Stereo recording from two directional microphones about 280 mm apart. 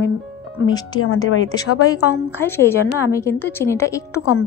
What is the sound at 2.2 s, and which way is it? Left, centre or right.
A woman's voice, centre.